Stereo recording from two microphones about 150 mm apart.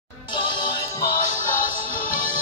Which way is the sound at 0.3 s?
30° left (ahead or behind).